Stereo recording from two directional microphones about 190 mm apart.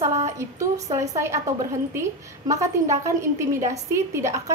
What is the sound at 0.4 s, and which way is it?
A woman's voice, 15° right (ahead or behind).